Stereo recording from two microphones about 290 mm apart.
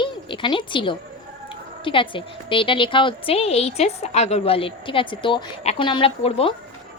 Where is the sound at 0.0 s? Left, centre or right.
Centre.